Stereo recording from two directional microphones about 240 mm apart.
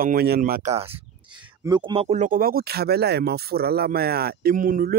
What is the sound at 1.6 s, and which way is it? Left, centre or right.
Speech, centre.